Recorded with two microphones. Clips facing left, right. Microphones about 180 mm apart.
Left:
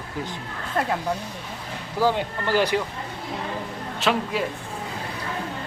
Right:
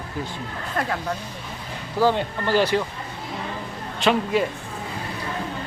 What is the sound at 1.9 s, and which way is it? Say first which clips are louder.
Speech: right 2 dB; 10° left (ahead or behind).